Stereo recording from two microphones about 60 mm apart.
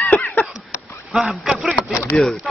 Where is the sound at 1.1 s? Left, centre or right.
Centre.